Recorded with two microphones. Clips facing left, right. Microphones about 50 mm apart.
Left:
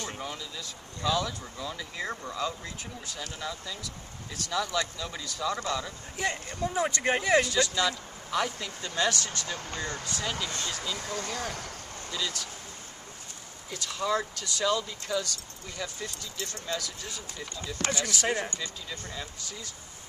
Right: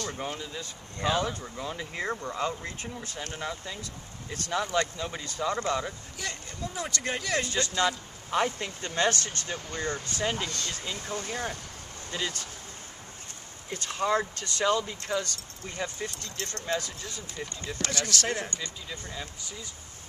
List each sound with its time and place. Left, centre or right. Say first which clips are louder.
0.2 s speech: right 3 dB; right
6.1 s speech: left 6 dB; left
7.4 s speech: even; right
13.7 s speech: right 2 dB; right
17.8 s speech: left 2 dB; left
18.1 s speech: left 1 dB; centre
18.9 s speech: even; centre